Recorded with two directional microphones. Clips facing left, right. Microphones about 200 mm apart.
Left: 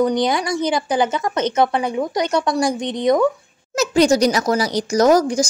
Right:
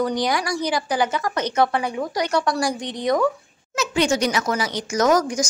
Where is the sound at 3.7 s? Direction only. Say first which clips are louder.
Left 6 dB; 40° left (ahead or behind).